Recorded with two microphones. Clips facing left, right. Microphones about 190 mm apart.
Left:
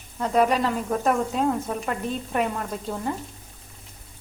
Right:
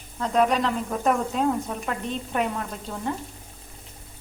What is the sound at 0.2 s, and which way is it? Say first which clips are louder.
Speech: left 1 dB; 5° left (ahead or behind).